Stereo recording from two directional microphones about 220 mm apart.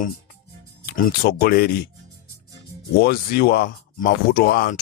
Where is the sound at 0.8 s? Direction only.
40° left (ahead or behind).